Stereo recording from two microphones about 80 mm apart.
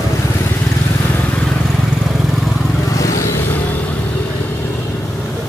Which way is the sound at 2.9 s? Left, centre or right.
Left.